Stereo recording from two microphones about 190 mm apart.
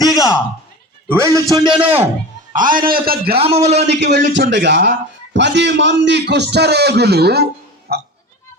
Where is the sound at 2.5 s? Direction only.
45° right (ahead or behind).